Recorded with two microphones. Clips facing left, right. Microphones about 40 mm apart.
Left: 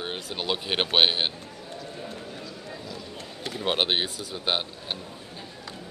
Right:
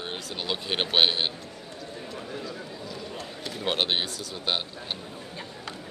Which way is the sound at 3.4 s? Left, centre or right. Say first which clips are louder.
Left 2 dB; centre.